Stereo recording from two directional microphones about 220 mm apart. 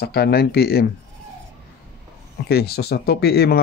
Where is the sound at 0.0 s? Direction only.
45° left (ahead or behind).